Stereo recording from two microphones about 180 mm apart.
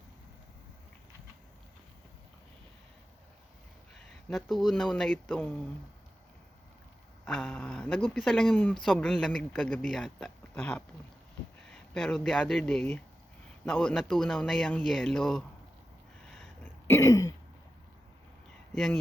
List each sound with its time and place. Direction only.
4.3 s speech: centre (ahead or behind)
7.3 s speech: 5° left (ahead or behind)
11.9 s speech: centre (ahead or behind)
16.4 s throat clearing: 10° left (ahead or behind)